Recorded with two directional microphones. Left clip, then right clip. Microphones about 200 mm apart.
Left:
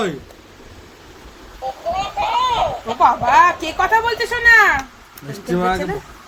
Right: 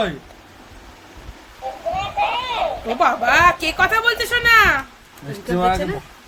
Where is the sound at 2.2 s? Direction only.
Centre (ahead or behind).